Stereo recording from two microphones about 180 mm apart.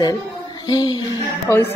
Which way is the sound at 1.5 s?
10° left (ahead or behind).